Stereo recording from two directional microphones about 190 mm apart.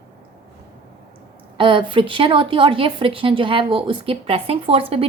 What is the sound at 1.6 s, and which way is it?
A woman's voice, 25° right (ahead or behind).